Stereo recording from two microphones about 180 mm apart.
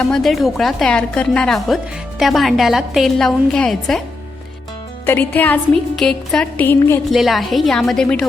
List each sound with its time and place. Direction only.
0.0 s speech: centre (ahead or behind)
5.0 s a woman's voice: 10° left (ahead or behind)
7.1 s speech: centre (ahead or behind)